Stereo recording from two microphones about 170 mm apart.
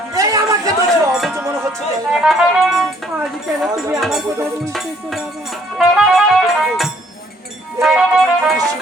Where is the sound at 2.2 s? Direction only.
Centre (ahead or behind).